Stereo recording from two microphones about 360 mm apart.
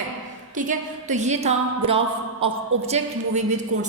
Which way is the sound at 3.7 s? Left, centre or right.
Right.